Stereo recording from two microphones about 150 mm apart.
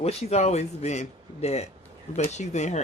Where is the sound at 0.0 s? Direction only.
45° left (ahead or behind).